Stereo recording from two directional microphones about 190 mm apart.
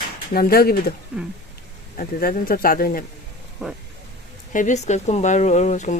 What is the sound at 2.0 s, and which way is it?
Speech, 50° left (ahead or behind).